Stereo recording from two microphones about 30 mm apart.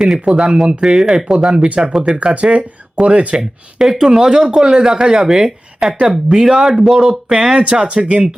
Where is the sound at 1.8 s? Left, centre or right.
Right.